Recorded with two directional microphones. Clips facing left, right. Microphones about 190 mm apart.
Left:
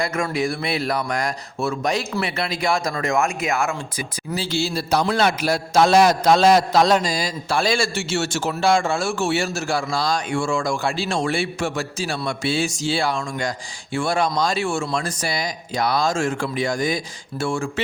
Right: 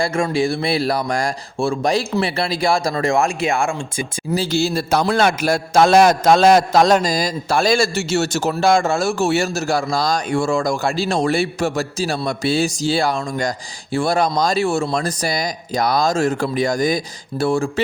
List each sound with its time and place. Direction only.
0.0 s a man's voice: 30° right (ahead or behind)
4.4 s a man's voice: 45° right (ahead or behind)